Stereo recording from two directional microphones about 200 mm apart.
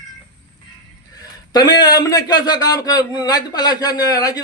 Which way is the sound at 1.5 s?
20° left (ahead or behind).